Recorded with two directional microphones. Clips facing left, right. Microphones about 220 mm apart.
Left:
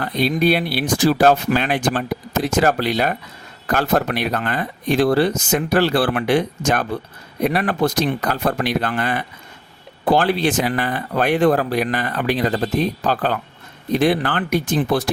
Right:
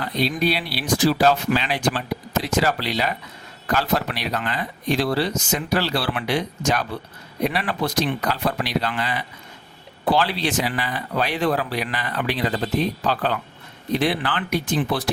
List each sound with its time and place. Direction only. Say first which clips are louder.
0.0 s speech: left 4 dB; 55° left (ahead or behind)